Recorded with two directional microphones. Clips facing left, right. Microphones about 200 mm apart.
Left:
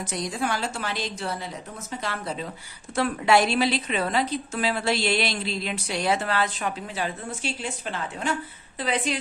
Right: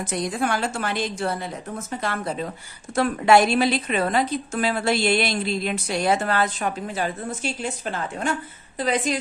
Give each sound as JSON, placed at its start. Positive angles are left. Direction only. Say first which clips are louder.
{"t": 0.0, "sound": "a woman's voice", "louder": "right 4 dB", "side_deg": -55}